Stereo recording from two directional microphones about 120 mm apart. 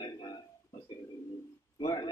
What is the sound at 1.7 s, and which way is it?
Speech, 40° left (ahead or behind).